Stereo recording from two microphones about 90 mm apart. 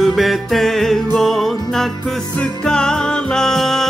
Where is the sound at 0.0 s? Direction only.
Centre (ahead or behind).